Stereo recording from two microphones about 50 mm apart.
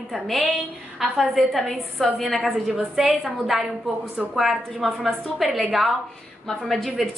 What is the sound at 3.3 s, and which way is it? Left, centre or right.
A woman's voice, centre.